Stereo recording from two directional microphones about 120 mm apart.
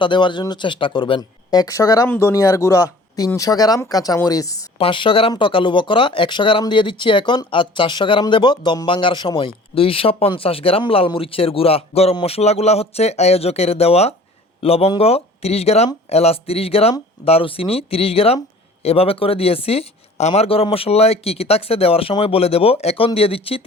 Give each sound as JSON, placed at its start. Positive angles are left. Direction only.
{"t": 0.0, "sound": "speech", "side_deg": 40}
{"t": 4.8, "sound": "speech", "side_deg": 45}